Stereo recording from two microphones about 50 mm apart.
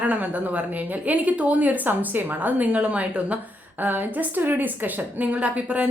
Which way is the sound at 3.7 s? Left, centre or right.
Right.